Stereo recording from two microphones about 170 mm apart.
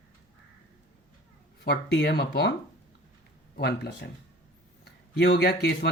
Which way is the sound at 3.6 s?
70° left (ahead or behind).